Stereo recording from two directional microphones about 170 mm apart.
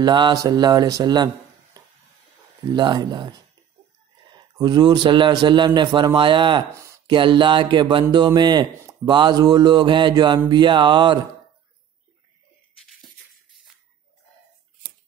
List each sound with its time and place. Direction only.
0.0 s speech: 25° right (ahead or behind)